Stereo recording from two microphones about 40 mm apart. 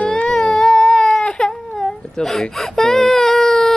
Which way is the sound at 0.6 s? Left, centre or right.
Centre.